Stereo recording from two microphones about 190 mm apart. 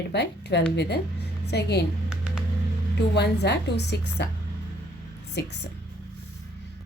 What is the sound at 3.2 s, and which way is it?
A woman's voice, 60° left (ahead or behind).